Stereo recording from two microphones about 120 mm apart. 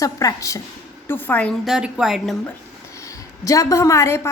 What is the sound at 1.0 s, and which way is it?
Speech, 15° left (ahead or behind).